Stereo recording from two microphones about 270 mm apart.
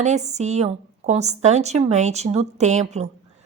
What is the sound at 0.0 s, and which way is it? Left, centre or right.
A woman's voice, right.